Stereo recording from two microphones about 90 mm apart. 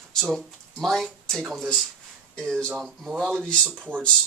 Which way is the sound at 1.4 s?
5° right (ahead or behind).